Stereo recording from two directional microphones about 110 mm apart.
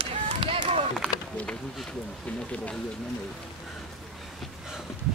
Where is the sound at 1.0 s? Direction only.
10° left (ahead or behind).